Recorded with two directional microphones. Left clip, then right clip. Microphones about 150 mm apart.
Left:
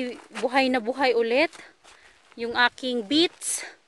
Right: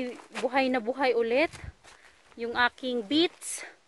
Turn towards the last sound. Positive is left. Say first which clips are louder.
# left 3 dB
turn(degrees=80)